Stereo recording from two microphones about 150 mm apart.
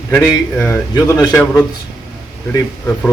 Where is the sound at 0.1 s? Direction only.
15° left (ahead or behind).